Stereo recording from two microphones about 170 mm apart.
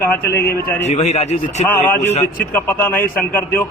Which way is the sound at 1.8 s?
10° left (ahead or behind).